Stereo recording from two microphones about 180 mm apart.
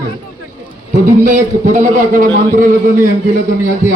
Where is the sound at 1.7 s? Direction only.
45° right (ahead or behind).